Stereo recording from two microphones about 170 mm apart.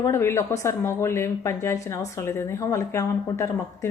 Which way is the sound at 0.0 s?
15° left (ahead or behind).